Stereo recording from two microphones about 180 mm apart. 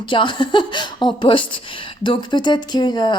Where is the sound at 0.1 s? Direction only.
25° left (ahead or behind).